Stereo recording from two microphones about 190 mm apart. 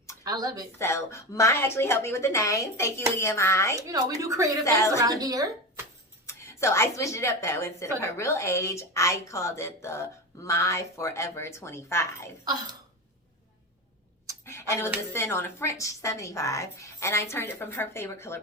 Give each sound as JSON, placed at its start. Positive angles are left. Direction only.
{"t": 0.3, "sound": "speech", "side_deg": -20}
{"t": 0.8, "sound": "a woman's voice", "side_deg": 15}
{"t": 3.8, "sound": "speech", "side_deg": -15}
{"t": 4.6, "sound": "a woman's voice", "side_deg": 15}
{"t": 4.9, "sound": "speech", "side_deg": -20}
{"t": 6.2, "sound": "a woman's voice", "side_deg": 15}
{"t": 14.4, "sound": "a woman's voice", "side_deg": 15}